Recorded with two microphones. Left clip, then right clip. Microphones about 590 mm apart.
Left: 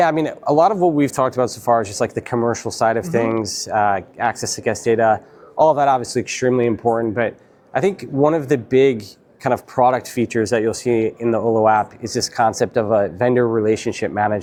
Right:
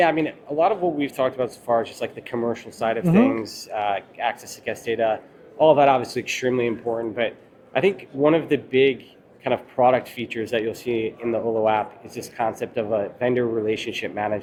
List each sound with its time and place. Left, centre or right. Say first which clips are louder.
0.0 s speech: left 3 dB; left
12.0 s speech: left 12 dB; left
12.4 s speech: left 7 dB; left